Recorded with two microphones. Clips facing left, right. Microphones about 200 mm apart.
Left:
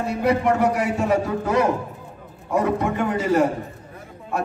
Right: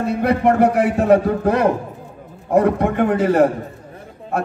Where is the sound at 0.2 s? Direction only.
55° right (ahead or behind).